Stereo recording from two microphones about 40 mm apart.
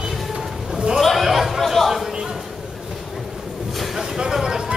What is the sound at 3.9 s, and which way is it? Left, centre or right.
Vehicle, centre.